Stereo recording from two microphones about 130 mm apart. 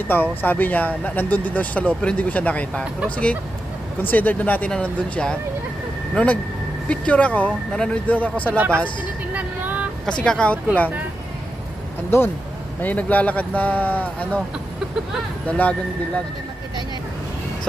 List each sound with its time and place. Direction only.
0.1 s speech: 15° left (ahead or behind)
4.0 s speech: 15° left (ahead or behind)
8.5 s speech: 15° right (ahead or behind)
9.3 s vehicle: 10° right (ahead or behind)
10.2 s speech: 5° left (ahead or behind)
12.1 s speech: 20° left (ahead or behind)
15.4 s speech: 10° left (ahead or behind)